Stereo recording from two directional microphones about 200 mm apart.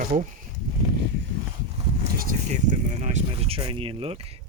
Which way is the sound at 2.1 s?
45° right (ahead or behind).